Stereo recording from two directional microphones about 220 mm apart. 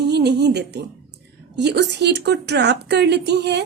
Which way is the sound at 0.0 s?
50° right (ahead or behind).